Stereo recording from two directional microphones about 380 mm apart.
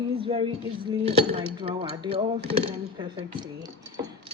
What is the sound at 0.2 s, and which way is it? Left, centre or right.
Speech, centre.